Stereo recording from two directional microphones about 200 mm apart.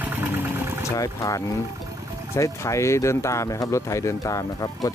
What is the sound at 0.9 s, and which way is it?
Speech, 15° left (ahead or behind).